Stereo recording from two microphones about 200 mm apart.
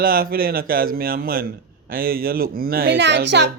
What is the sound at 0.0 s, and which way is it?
A man's voice, 45° right (ahead or behind).